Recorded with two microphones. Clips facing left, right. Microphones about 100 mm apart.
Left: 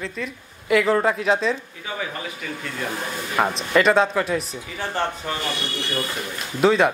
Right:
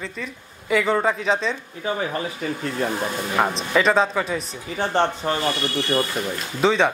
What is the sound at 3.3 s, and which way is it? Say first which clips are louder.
A woman's voice: left 2 dB; 5° right (ahead or behind).